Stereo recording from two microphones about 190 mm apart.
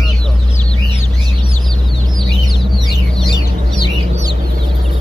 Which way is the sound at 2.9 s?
Centre (ahead or behind).